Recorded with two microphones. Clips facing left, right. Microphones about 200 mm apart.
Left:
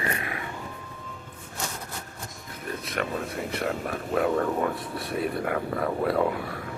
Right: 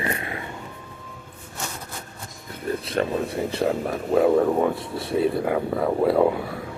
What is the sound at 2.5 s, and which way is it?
Speech, 30° right (ahead or behind).